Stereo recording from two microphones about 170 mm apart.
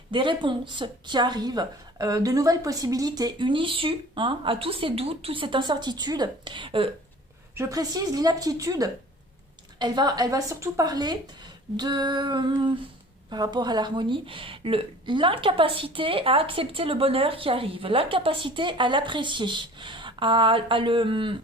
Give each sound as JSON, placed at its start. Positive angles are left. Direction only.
{"t": 0.1, "sound": "a woman's voice", "side_deg": -30}
{"t": 7.5, "sound": "a woman's voice", "side_deg": -20}